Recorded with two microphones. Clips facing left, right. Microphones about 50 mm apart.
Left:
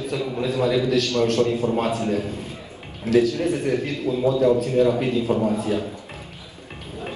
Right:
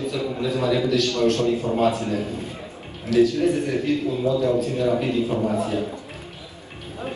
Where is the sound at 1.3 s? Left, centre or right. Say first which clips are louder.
Left 1 dB; left.